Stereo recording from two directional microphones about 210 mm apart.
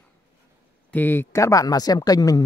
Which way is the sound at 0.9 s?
10° left (ahead or behind).